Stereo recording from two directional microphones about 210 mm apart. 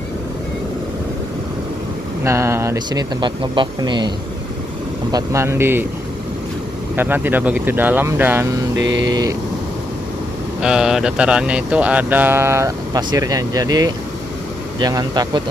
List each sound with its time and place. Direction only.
2.2 s speech: 15° right (ahead or behind)
5.1 s speech: 15° right (ahead or behind)
7.0 s speech: 10° right (ahead or behind)
8.8 s a sound: 60° right (ahead or behind)
9.1 s speech: 15° right (ahead or behind)
10.6 s speech: 5° right (ahead or behind); by 15.4 s 20° right (ahead or behind)